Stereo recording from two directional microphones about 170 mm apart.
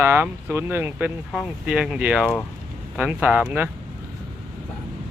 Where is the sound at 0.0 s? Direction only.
10° right (ahead or behind).